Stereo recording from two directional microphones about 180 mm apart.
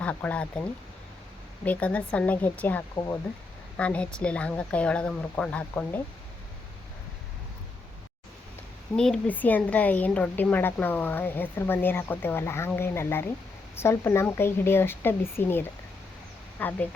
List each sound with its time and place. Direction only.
0.0 s speech: 10° left (ahead or behind)
1.6 s speech: 10° left (ahead or behind)
2.9 s speech: 20° left (ahead or behind)
3.8 s speech: 5° left (ahead or behind)
9.0 s speech: 5° left (ahead or behind)